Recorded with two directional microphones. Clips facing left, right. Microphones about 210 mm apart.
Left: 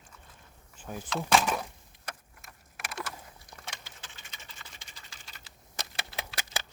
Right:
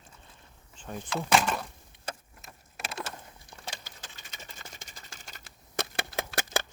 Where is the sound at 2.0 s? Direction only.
25° right (ahead or behind).